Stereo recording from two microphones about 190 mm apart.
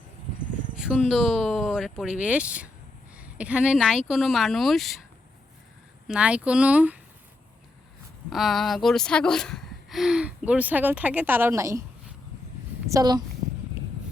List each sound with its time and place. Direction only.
0.8 s speech: centre (ahead or behind)
6.1 s speech: 5° right (ahead or behind)
8.3 s speech: centre (ahead or behind)
12.9 s a woman's voice: 20° right (ahead or behind)